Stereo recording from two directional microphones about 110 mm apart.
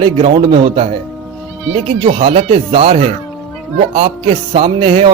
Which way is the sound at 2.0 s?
55° right (ahead or behind).